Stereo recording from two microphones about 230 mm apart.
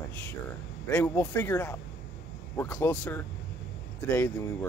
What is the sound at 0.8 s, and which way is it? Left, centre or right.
Speech, centre.